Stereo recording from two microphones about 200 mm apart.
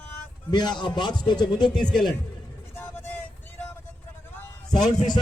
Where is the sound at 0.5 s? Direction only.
20° left (ahead or behind).